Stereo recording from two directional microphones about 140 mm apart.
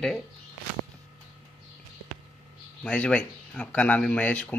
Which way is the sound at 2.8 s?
10° left (ahead or behind).